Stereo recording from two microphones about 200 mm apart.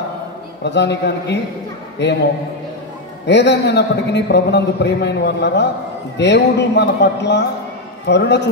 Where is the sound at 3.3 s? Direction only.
60° left (ahead or behind).